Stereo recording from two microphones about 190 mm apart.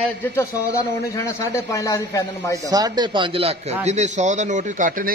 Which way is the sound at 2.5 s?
20° right (ahead or behind).